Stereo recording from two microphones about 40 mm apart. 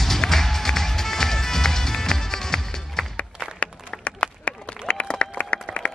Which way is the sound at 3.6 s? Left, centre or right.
Left.